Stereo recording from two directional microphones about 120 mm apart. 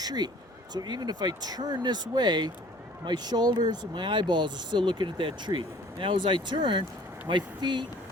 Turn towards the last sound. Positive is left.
turn(degrees=-40)  # may be behind; listen again after turning